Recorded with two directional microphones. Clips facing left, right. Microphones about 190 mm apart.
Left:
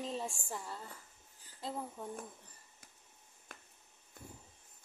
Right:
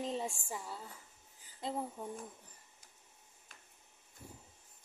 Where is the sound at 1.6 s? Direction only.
20° right (ahead or behind).